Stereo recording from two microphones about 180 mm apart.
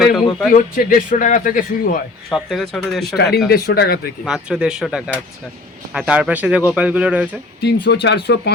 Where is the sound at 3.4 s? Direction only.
60° left (ahead or behind).